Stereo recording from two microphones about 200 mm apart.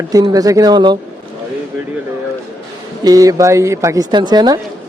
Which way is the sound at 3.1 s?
15° right (ahead or behind).